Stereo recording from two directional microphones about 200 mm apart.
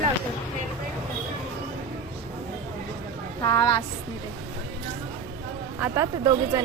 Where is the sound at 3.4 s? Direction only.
20° left (ahead or behind).